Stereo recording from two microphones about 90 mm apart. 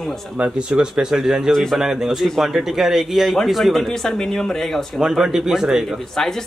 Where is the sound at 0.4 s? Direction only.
10° right (ahead or behind); by 5.0 s 5° left (ahead or behind).